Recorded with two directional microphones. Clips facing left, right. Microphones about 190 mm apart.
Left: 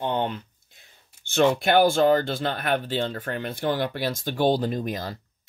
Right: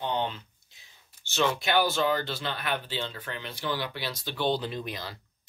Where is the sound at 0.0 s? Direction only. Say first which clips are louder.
Left 4 dB; 50° left (ahead or behind).